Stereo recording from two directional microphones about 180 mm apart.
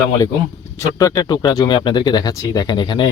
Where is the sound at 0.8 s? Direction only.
15° left (ahead or behind).